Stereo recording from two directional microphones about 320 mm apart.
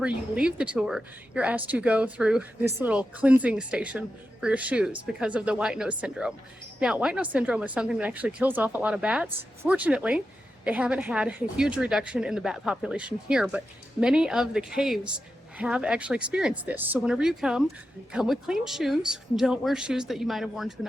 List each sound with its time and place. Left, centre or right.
0.0 s speech: centre